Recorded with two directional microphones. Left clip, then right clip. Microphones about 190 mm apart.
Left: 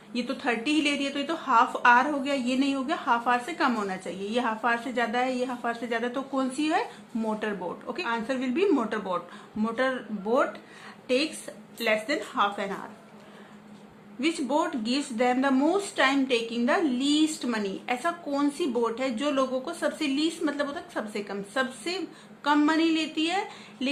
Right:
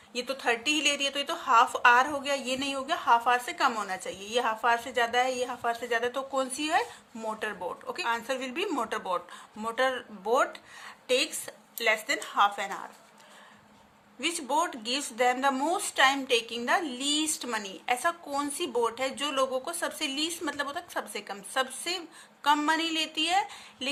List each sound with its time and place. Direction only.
0.1 s a woman's voice: 45° right (ahead or behind)
14.2 s a woman's voice: 45° right (ahead or behind)